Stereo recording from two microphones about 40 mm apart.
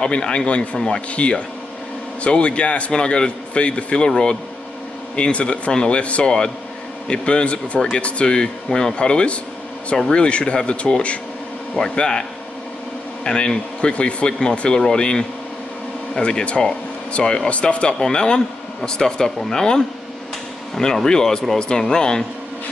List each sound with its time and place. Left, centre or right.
0.0 s a man's voice: left
1.1 s a man's voice: left
11.9 s a man's voice: left
17.5 s a man's voice: left
17.9 s speech: centre